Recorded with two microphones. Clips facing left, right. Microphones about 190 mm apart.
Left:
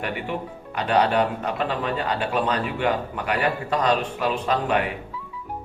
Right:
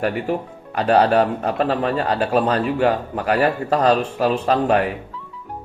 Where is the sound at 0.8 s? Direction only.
40° right (ahead or behind).